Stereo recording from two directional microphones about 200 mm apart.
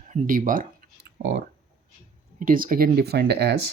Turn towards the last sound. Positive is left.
turn(degrees=-55)  # may be behind; listen again after turning